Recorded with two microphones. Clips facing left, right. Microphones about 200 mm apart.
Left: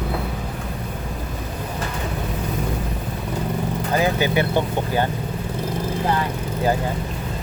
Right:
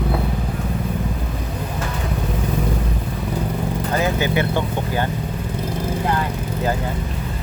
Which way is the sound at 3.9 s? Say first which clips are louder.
Left 1 dB; 15° left (ahead or behind).